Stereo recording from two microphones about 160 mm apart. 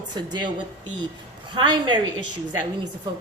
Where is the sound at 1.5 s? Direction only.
30° right (ahead or behind).